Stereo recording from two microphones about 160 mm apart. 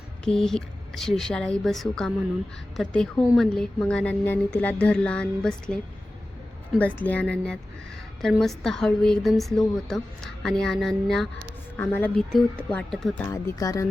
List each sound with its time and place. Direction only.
0.3 s a woman's voice: 5° left (ahead or behind)
13.2 s speech: 20° left (ahead or behind)